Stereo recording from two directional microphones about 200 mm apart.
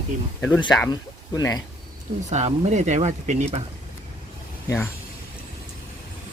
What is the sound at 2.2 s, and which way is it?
Speech, 35° right (ahead or behind).